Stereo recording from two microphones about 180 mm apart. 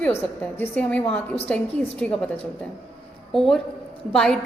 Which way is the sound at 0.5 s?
10° left (ahead or behind).